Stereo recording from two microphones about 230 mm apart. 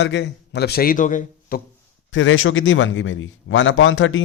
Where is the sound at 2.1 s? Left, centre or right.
Left.